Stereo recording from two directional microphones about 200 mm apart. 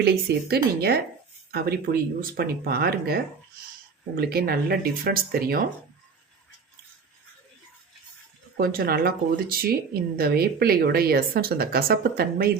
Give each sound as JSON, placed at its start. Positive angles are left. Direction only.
{"t": 0.0, "sound": "speech", "side_deg": -55}
{"t": 4.2, "sound": "speech", "side_deg": -50}
{"t": 8.5, "sound": "speech", "side_deg": -45}